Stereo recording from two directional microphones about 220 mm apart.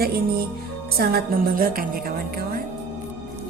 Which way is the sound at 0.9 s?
40° right (ahead or behind).